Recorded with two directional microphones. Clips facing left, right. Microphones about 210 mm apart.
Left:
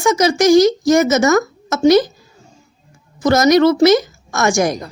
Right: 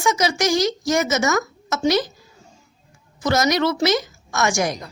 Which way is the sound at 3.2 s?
45° left (ahead or behind).